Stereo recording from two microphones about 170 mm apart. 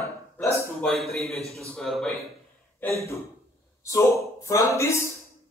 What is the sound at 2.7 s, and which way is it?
Speech, 15° left (ahead or behind).